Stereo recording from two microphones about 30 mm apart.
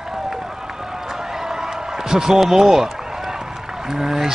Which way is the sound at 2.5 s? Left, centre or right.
Centre.